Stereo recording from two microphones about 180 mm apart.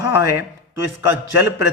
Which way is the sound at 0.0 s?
15° right (ahead or behind).